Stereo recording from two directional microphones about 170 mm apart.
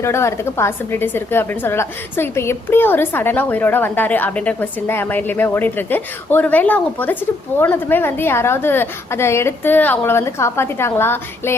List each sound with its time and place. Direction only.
0.0 s a woman's voice: 15° left (ahead or behind)